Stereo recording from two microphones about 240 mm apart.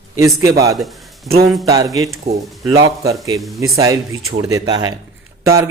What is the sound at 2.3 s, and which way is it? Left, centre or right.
Speech, right.